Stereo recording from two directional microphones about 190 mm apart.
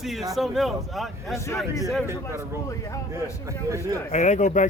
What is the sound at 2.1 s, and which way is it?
Speech, 15° right (ahead or behind).